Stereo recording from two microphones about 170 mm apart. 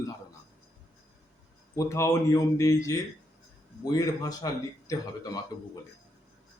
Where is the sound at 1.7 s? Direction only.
15° left (ahead or behind).